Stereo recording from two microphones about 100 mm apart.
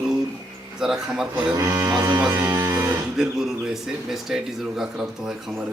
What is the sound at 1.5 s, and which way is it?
Speech, 30° right (ahead or behind).